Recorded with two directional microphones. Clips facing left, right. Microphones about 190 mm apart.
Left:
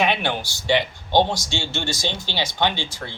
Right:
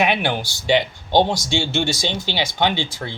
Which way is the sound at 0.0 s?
10° right (ahead or behind).